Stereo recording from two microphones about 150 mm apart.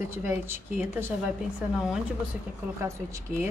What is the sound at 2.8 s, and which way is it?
Speech, 20° right (ahead or behind).